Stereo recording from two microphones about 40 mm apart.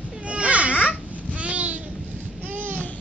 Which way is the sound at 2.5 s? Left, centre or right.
Right.